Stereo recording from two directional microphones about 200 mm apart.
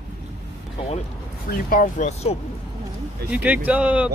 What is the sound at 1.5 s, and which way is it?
Speech, 45° left (ahead or behind).